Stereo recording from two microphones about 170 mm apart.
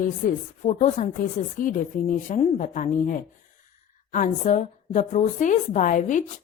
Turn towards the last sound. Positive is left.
turn(degrees=50)  # may be behind; listen again after turning